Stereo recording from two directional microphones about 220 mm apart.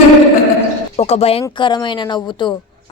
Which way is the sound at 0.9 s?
30° left (ahead or behind).